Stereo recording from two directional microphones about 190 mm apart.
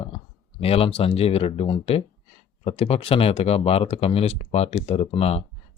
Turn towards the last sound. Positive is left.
turn(degrees=30)  # may be behind; listen again after turning